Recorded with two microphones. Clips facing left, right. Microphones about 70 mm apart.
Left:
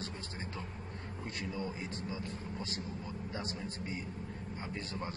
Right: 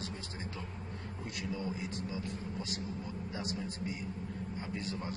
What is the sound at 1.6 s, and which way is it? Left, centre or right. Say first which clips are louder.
Speech: right 1 dB; left.